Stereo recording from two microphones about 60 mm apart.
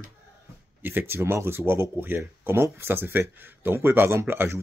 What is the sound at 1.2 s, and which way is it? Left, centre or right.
Speech, right.